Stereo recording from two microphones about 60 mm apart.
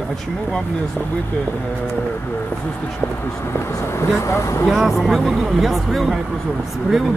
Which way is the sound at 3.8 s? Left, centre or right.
Left.